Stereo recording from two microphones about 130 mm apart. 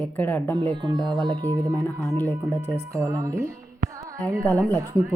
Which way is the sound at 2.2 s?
15° left (ahead or behind).